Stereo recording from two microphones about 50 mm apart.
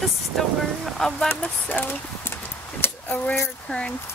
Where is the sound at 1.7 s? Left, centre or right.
Left.